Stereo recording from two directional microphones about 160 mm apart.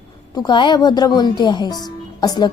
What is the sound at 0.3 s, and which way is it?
A woman's voice, 30° left (ahead or behind).